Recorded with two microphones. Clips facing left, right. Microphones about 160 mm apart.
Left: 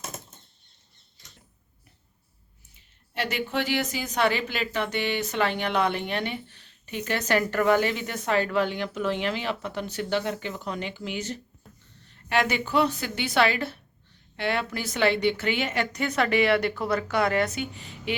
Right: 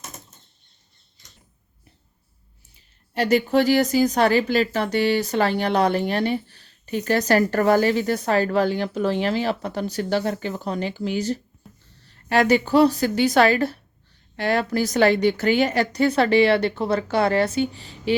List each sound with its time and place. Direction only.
3.2 s speech: 40° right (ahead or behind)